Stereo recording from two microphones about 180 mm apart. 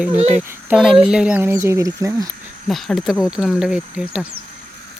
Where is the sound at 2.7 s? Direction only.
Centre (ahead or behind).